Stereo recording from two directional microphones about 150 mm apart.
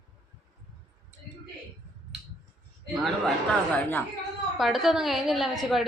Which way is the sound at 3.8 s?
10° left (ahead or behind).